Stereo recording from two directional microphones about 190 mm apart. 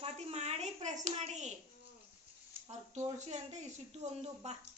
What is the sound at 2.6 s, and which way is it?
A child's voice, 35° right (ahead or behind).